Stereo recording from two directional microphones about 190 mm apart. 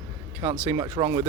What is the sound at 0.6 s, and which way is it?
Speech, 25° right (ahead or behind).